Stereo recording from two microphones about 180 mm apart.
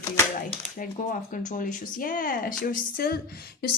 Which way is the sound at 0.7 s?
45° left (ahead or behind).